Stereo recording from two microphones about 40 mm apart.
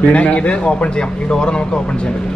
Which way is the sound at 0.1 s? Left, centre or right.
Left.